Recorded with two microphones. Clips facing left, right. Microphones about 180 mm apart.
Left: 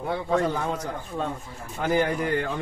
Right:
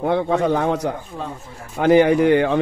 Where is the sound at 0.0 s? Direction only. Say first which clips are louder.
Right 6 dB; 70° right (ahead or behind).